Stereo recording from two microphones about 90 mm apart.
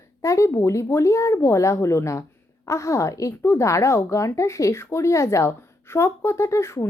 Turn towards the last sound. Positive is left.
turn(degrees=30)  # may be behind; listen again after turning